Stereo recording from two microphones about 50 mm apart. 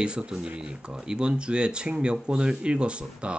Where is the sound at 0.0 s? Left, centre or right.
Centre.